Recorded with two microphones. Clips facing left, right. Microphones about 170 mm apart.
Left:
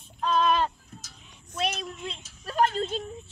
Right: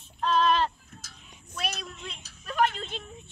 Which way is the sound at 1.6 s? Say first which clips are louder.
Left 5 dB; 25° left (ahead or behind).